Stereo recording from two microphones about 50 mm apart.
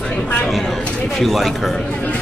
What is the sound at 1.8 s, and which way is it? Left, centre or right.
Speech, left.